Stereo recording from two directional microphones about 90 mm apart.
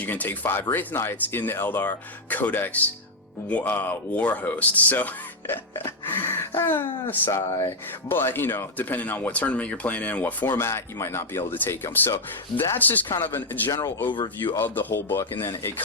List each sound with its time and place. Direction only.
0.0 s speech: 20° left (ahead or behind)
6.1 s a sound: 25° left (ahead or behind)
6.6 s speech: 25° left (ahead or behind)
14.1 s speech: 70° left (ahead or behind)
14.6 s speech: 25° left (ahead or behind)